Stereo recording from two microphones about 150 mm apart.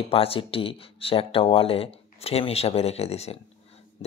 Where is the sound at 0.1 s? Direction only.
40° left (ahead or behind).